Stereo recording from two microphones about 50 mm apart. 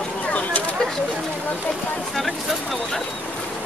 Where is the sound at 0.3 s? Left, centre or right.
Left.